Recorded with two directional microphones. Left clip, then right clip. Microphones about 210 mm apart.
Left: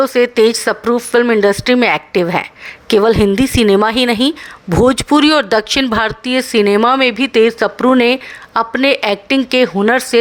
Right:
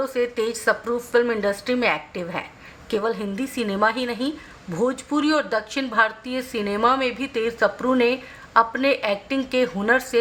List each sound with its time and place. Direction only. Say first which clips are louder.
0.0 s speech: left 13 dB; 45° left (ahead or behind)